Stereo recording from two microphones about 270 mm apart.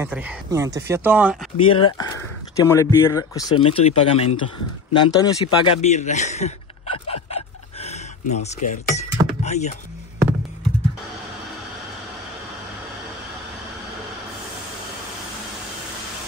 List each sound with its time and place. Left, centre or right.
0.0 s speech: centre
1.6 s speech: centre
4.9 s a sound: centre